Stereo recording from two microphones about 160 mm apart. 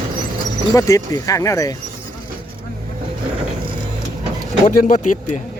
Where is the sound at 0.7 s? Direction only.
20° left (ahead or behind).